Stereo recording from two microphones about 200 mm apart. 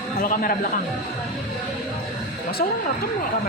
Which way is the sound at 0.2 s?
45° left (ahead or behind).